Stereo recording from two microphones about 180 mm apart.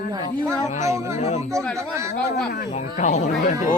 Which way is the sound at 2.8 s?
45° left (ahead or behind).